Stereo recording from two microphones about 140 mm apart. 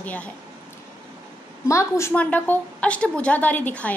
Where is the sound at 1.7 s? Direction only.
20° left (ahead or behind).